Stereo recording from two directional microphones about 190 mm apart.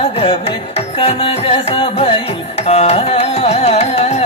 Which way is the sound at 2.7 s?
35° left (ahead or behind).